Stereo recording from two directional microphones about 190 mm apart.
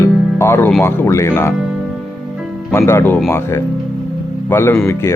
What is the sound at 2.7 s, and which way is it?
Speech, 15° left (ahead or behind).